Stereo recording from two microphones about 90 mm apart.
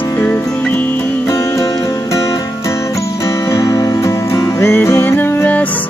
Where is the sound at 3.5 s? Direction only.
40° left (ahead or behind); by 5.7 s 20° left (ahead or behind).